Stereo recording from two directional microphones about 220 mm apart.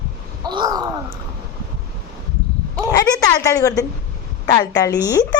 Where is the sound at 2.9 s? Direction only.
15° left (ahead or behind).